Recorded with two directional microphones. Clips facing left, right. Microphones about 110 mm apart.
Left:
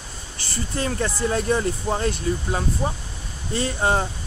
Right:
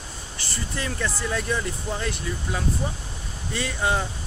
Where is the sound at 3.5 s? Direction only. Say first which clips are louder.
Left 3 dB; 35° left (ahead or behind).